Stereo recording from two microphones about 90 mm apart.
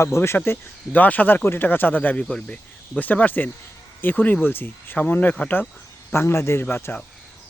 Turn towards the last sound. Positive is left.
turn(degrees=20)  # may be behind; listen again after turning